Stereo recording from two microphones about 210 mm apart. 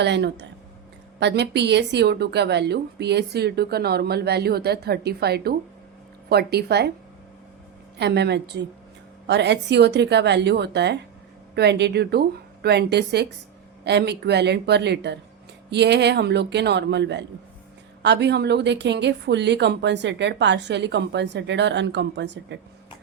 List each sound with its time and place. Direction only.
0.0 s a woman's voice: 55° right (ahead or behind)
7.9 s a woman's voice: 55° right (ahead or behind)